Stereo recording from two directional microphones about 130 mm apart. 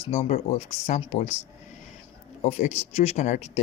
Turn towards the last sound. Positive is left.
turn(degrees=60)  # may be behind; listen again after turning